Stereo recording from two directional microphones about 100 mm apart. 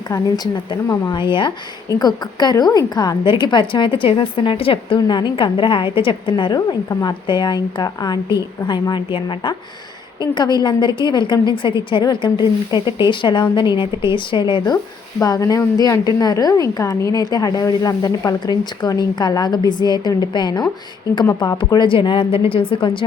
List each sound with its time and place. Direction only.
0.1 s a woman's voice: 40° left (ahead or behind)
1.9 s a woman's voice: 40° left (ahead or behind)
3.2 s a woman's voice: 50° left (ahead or behind)
4.9 s a woman's voice: 50° left (ahead or behind)